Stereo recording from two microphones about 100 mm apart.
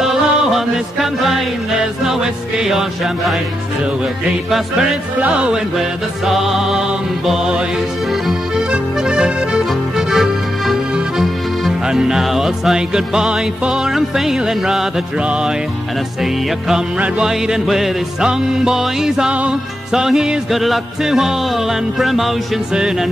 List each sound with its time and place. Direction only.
0.0 s music: 5° right (ahead or behind)
4.5 s music: 5° right (ahead or behind)
8.3 s accordion: 5° right (ahead or behind)
16.6 s music: 5° right (ahead or behind)